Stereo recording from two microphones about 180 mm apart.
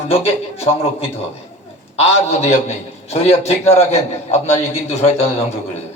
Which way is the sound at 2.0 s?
40° left (ahead or behind).